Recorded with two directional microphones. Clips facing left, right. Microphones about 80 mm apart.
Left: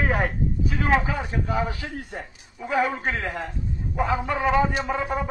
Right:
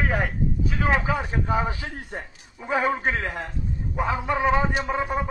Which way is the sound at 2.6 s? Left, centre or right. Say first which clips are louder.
Even; right.